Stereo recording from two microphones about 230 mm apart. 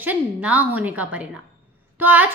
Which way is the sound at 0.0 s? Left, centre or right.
Centre.